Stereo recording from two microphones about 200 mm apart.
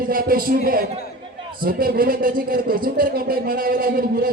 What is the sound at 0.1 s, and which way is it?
Speech, 45° right (ahead or behind).